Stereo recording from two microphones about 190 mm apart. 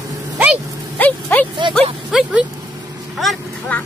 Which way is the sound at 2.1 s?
Centre (ahead or behind).